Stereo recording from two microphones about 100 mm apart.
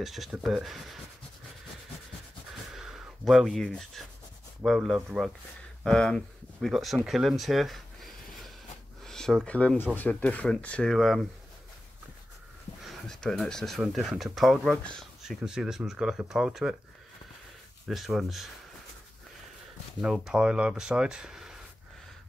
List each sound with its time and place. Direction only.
0.0 s speech: centre (ahead or behind)
2.7 s a sound: 5° right (ahead or behind)
4.6 s speech: 5° right (ahead or behind)
12.8 s speech: 5° left (ahead or behind)
14.8 s speech: 10° left (ahead or behind)
15.2 s speech: 5° right (ahead or behind)
17.8 s speech: centre (ahead or behind)
20.0 s speech: 5° right (ahead or behind)